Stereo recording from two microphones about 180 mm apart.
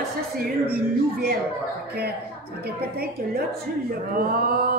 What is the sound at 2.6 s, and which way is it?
Speech, 60° right (ahead or behind).